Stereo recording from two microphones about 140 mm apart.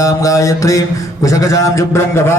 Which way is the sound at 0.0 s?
25° left (ahead or behind).